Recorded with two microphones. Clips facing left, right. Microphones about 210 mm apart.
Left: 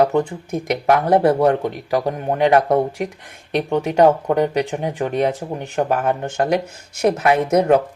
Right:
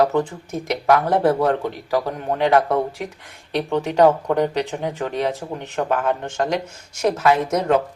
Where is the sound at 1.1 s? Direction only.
15° left (ahead or behind).